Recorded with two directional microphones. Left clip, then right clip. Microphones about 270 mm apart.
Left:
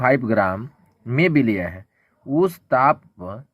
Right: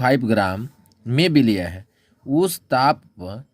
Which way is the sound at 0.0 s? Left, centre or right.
Right.